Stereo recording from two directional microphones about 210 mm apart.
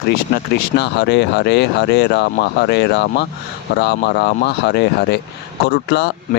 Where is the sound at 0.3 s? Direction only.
55° left (ahead or behind).